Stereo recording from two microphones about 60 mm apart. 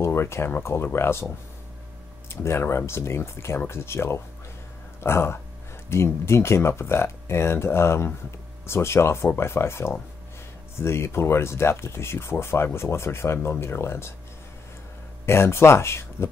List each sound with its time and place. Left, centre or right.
0.0 s speech: left
2.2 s speech: left
15.2 s speech: left